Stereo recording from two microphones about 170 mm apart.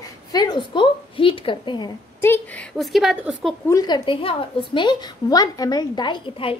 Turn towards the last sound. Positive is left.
turn(degrees=30)  # may be behind; listen again after turning